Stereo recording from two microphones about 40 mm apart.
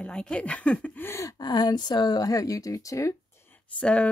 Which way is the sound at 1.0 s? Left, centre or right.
Left.